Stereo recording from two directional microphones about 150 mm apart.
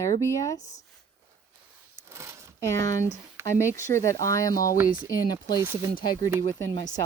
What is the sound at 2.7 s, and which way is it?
Speech, 20° left (ahead or behind).